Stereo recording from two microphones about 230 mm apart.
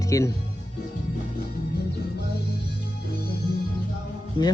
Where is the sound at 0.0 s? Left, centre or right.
Centre.